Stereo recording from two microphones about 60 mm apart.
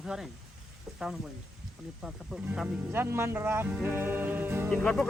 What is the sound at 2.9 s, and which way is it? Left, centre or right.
Music, right.